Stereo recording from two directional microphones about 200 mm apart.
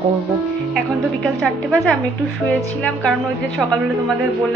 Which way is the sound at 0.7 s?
Centre (ahead or behind).